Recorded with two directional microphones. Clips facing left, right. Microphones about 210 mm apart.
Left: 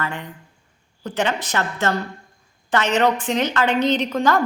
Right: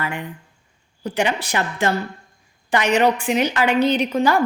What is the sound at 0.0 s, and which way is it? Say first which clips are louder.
A woman's voice: right 1 dB; 10° right (ahead or behind).